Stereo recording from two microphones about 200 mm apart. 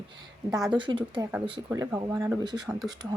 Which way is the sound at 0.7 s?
25° right (ahead or behind).